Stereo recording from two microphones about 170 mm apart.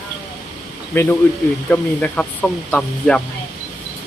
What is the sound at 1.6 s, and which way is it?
Speech, 10° left (ahead or behind).